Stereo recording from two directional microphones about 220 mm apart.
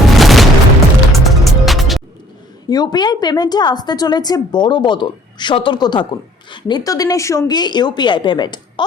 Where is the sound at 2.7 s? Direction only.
20° left (ahead or behind).